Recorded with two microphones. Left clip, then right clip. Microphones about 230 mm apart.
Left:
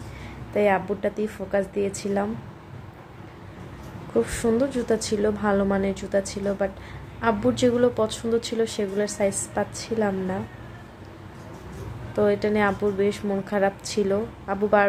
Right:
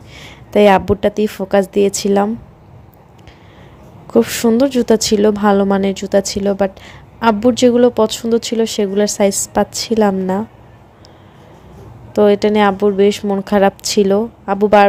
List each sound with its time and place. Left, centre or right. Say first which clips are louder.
0.2 s a woman's voice: right 12 dB; right
4.1 s a woman's voice: right 10 dB; right
12.1 s a woman's voice: right 10 dB; right